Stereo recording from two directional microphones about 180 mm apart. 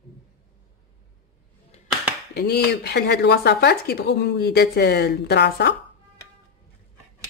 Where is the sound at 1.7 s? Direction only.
35° left (ahead or behind).